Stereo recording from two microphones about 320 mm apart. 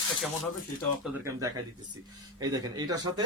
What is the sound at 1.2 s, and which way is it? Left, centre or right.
Speech, centre.